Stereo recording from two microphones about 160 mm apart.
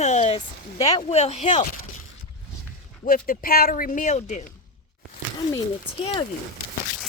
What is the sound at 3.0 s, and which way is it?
Speech, 60° left (ahead or behind).